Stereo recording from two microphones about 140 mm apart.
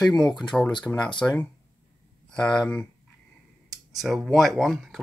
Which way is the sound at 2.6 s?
10° left (ahead or behind).